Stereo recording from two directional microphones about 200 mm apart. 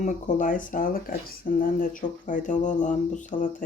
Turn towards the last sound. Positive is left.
turn(degrees=40)  # may be behind; listen again after turning